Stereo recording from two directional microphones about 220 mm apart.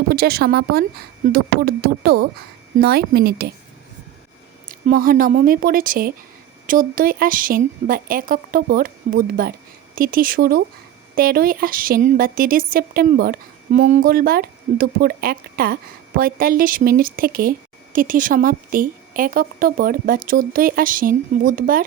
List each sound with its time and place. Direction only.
0.1 s speech: 45° right (ahead or behind)
4.7 s speech: 40° right (ahead or behind)